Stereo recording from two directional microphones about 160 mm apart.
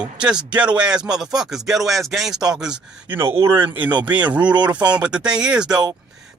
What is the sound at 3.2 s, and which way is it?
Speech, 15° right (ahead or behind).